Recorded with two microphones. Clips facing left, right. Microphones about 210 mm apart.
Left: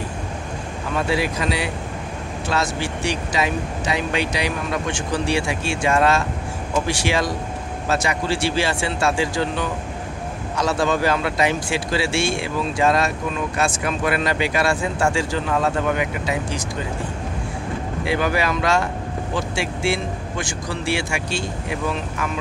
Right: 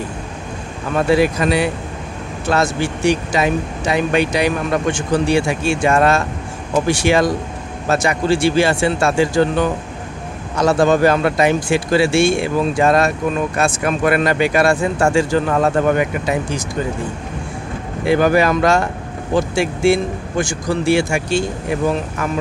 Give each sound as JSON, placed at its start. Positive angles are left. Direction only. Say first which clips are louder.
{"t": 0.9, "sound": "speech", "louder": "right 8 dB", "side_deg": -50}
{"t": 18.0, "sound": "speech", "louder": "right 8 dB", "side_deg": -45}